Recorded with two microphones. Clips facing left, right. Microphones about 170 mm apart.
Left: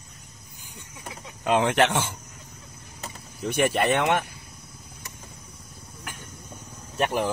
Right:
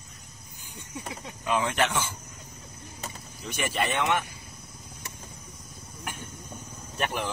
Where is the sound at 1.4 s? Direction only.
70° left (ahead or behind).